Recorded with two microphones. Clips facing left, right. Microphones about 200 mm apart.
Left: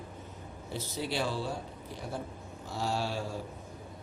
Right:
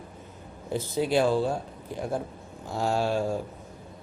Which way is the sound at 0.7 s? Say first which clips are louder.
Right 9 dB; 50° right (ahead or behind).